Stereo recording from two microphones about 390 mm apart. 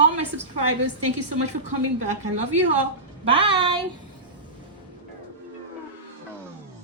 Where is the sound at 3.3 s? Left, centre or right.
Centre.